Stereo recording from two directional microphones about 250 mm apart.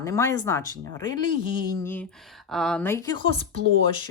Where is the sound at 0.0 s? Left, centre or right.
Centre.